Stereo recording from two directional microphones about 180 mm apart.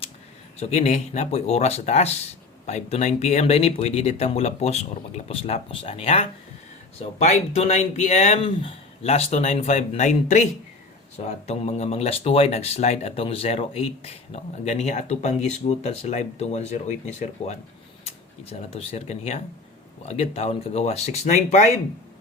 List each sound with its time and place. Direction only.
0.6 s speech: 40° left (ahead or behind)